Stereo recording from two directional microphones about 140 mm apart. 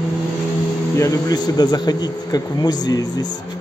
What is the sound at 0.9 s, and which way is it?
Speech, 20° left (ahead or behind).